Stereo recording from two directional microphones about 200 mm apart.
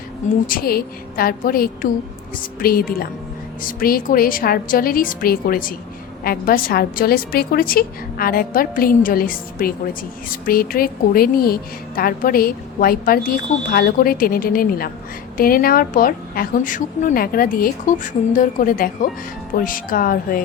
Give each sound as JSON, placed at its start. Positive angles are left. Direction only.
{"t": 0.4, "sound": "a woman's voice", "side_deg": 45}